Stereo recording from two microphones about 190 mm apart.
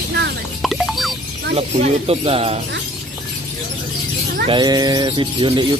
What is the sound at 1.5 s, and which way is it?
Speech, 30° right (ahead or behind).